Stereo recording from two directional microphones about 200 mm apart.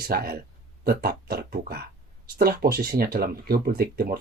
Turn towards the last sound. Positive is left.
turn(degrees=-50)  # may be behind; listen again after turning